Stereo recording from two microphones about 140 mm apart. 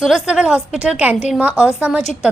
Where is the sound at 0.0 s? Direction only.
5° right (ahead or behind).